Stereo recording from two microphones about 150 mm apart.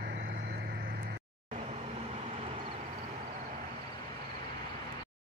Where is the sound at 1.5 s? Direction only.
50° right (ahead or behind).